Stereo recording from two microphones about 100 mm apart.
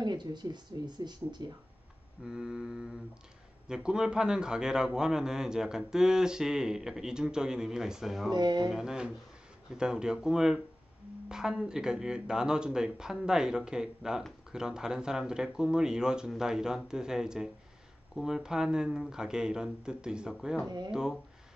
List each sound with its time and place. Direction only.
0.0 s speech: 45° right (ahead or behind)
2.2 s a man's voice: 5° right (ahead or behind)
8.3 s speech: 45° right (ahead or behind)
8.6 s a man's voice: 5° right (ahead or behind)
20.6 s speech: 45° right (ahead or behind)
20.9 s a man's voice: 5° right (ahead or behind)